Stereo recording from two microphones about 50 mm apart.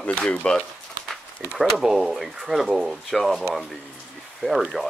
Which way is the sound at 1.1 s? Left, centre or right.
Centre.